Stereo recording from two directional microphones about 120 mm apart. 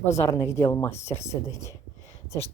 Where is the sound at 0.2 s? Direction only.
25° left (ahead or behind).